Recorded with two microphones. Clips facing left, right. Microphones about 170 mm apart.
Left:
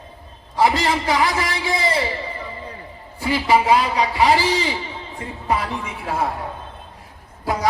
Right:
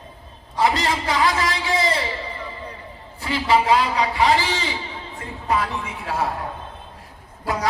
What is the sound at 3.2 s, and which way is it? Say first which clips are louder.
A man's voice: left 2 dB; 10° left (ahead or behind).